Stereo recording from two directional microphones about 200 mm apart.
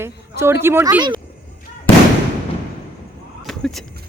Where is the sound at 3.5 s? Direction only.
Centre (ahead or behind).